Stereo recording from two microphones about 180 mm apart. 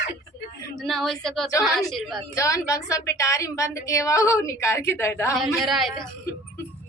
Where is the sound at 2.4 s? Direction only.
20° left (ahead or behind).